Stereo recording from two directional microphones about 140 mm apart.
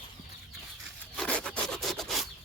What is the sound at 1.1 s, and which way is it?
Rub, 5° left (ahead or behind).